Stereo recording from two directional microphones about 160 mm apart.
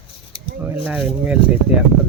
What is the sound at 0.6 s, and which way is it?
Speech, 10° right (ahead or behind).